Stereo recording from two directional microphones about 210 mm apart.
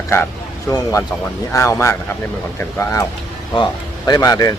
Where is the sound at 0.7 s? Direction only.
15° left (ahead or behind).